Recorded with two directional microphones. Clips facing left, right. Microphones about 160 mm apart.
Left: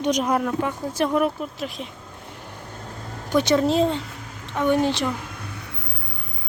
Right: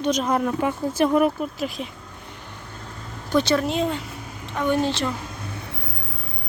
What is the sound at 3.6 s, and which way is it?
Speech, 30° left (ahead or behind).